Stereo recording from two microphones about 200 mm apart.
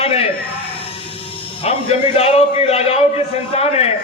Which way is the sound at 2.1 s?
30° left (ahead or behind).